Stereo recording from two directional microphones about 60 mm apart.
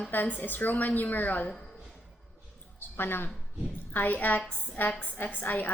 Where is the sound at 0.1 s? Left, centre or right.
Left.